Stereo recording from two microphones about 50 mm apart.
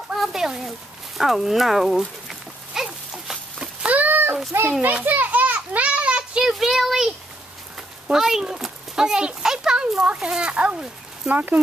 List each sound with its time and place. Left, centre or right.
0.1 s a sound: centre
3.8 s a sound: right
5.0 s children playing: right
6.4 s speech: centre
8.1 s a child's voice: centre
9.8 s speech: right